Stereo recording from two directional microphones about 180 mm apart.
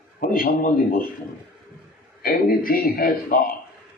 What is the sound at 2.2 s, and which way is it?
Speech, 55° left (ahead or behind).